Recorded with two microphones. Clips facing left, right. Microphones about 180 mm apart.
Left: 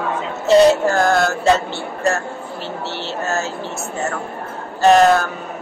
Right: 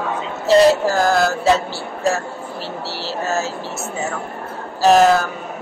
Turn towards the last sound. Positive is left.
turn(degrees=0)  # may be behind; listen again after turning